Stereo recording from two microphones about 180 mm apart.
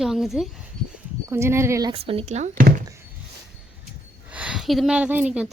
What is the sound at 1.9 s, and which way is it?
Speech, 30° right (ahead or behind).